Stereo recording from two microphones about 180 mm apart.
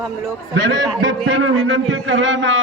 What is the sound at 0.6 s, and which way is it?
A man's voice, 90° right.